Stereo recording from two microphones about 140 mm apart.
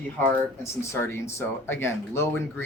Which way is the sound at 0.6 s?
20° left (ahead or behind).